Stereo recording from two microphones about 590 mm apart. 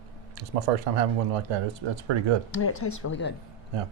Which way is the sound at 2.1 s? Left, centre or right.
Right.